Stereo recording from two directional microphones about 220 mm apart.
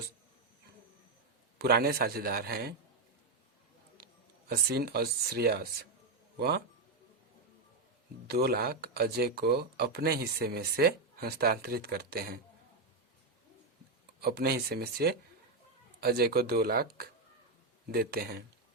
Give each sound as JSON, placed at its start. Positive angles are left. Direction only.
{"t": 1.5, "sound": "speech", "side_deg": -45}
{"t": 3.9, "sound": "speech", "side_deg": -45}
{"t": 8.3, "sound": "speech", "side_deg": -45}
{"t": 14.2, "sound": "speech", "side_deg": -45}